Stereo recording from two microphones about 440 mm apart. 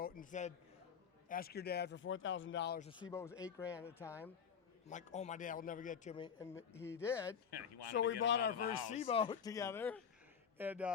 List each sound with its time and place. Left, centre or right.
0.0 s a man's voice: centre
4.9 s a man's voice: centre
7.5 s speech: left
8.9 s a man's voice: centre